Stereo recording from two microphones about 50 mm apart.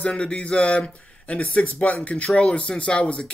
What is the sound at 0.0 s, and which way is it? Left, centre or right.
Speech, left.